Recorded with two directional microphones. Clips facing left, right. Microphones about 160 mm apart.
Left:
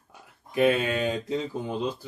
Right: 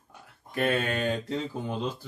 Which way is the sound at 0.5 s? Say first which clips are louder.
Left 4 dB; 10° left (ahead or behind).